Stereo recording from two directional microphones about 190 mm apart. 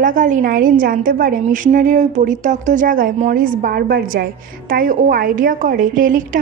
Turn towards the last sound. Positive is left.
turn(degrees=-45)  # may be behind; listen again after turning